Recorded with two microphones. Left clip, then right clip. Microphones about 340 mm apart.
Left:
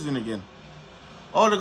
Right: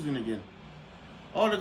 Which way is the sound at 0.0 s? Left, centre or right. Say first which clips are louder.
Left 3 dB; centre.